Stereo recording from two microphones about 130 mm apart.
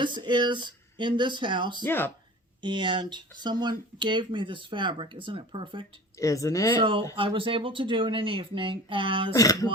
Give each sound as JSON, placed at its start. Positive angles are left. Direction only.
{"t": 0.0, "sound": "speech", "side_deg": -35}
{"t": 1.8, "sound": "speech", "side_deg": 15}
{"t": 2.6, "sound": "speech", "side_deg": -35}
{"t": 6.1, "sound": "speech", "side_deg": 25}
{"t": 6.7, "sound": "speech", "side_deg": -40}
{"t": 9.3, "sound": "speech", "side_deg": 25}